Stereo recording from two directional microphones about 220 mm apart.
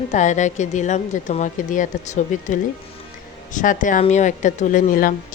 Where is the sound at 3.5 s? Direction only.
35° left (ahead or behind).